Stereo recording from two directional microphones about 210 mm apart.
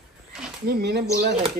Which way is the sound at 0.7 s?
50° right (ahead or behind).